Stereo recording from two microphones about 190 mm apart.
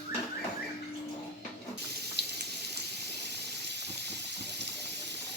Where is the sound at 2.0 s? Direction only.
60° right (ahead or behind).